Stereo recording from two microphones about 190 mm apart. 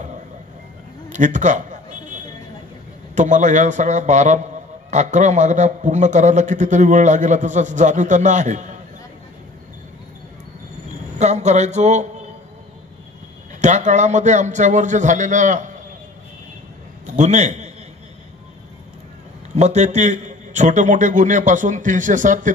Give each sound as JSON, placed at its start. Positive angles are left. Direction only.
{"t": 1.1, "sound": "a sound", "side_deg": -40}
{"t": 3.2, "sound": "a man's voice", "side_deg": -40}
{"t": 11.1, "sound": "a man's voice", "side_deg": -35}
{"t": 13.6, "sound": "a man's voice", "side_deg": -40}
{"t": 17.0, "sound": "a man's voice", "side_deg": -40}
{"t": 19.5, "sound": "a man's voice", "side_deg": -35}